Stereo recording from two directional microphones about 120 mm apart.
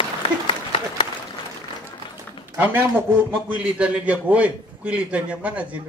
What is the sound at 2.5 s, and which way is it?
A man's voice, 15° right (ahead or behind).